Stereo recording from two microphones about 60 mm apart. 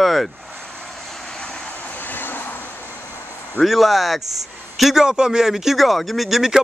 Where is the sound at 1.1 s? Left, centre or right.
Centre.